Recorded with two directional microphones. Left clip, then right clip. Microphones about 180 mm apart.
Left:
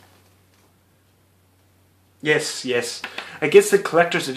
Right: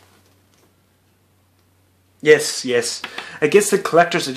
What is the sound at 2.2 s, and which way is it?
Speech, 45° right (ahead or behind).